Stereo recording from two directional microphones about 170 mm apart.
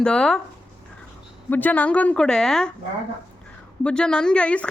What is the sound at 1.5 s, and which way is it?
A woman's voice, 10° left (ahead or behind).